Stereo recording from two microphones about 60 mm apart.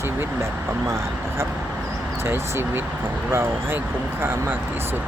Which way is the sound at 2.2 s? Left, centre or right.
Right.